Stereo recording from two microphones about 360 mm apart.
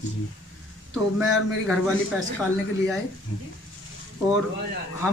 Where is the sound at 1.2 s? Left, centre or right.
Centre.